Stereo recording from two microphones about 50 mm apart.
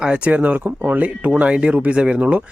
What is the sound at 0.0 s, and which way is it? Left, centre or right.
A man's voice, right.